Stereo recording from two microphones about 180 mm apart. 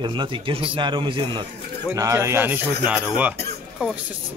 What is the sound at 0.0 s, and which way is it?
Speech, 25° right (ahead or behind).